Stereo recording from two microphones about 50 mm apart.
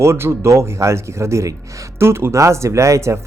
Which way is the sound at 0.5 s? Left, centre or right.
Right.